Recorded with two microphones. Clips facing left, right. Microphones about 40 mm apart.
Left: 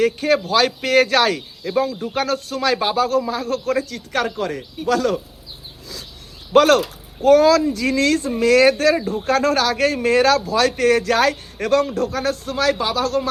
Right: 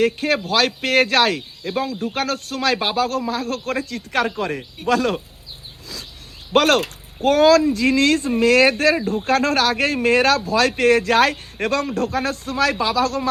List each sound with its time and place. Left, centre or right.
0.0 s speech: right
2.9 s a man's voice: right
6.5 s a man's voice: right